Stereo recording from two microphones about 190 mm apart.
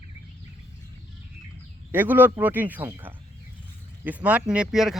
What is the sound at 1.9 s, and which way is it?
Speech, 10° right (ahead or behind).